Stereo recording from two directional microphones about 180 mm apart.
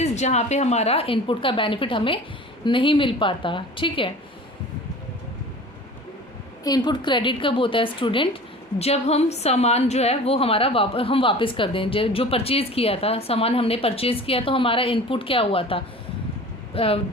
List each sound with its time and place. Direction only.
0.0 s a woman's voice: 40° left (ahead or behind)
6.7 s a woman's voice: 25° left (ahead or behind)